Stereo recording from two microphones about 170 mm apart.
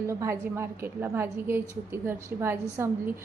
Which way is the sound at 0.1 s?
15° right (ahead or behind).